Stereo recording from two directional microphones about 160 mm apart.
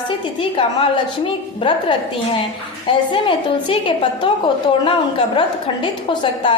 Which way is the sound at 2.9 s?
35° left (ahead or behind).